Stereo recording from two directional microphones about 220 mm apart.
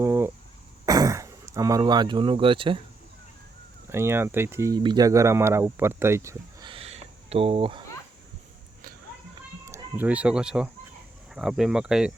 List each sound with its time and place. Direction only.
0.0 s cough: 10° right (ahead or behind)
0.9 s speech: 15° right (ahead or behind)
3.8 s speech: 10° right (ahead or behind)
9.6 s speech: 10° right (ahead or behind)